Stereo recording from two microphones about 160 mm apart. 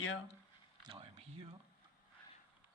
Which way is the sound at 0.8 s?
35° right (ahead or behind).